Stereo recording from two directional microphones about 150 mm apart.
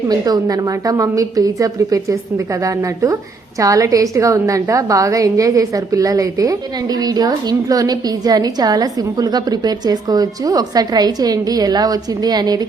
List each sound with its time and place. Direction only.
0.1 s a woman's voice: 25° right (ahead or behind)